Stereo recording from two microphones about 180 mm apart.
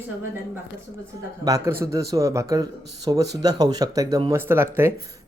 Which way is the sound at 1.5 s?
15° right (ahead or behind).